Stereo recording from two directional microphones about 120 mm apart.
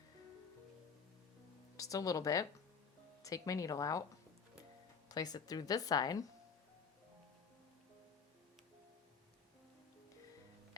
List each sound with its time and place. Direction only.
1.7 s speech: 30° left (ahead or behind)
5.0 s a woman's voice: 35° left (ahead or behind)